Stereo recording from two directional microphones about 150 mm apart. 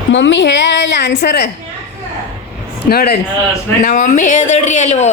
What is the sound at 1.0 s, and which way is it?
Speech, 90° left.